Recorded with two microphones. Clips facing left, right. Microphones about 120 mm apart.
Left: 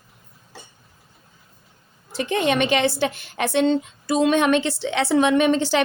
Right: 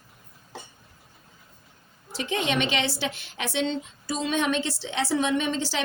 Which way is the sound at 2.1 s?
50° left (ahead or behind).